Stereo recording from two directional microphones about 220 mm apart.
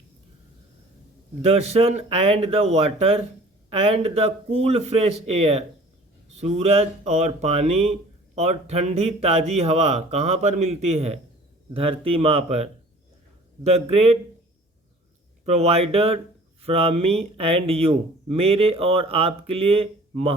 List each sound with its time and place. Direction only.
1.4 s speech: 25° right (ahead or behind)
13.7 s speech: 30° right (ahead or behind)
15.4 s speech: 30° right (ahead or behind)